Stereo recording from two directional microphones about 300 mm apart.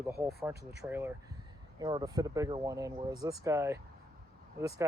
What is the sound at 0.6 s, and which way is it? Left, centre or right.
Speech, right.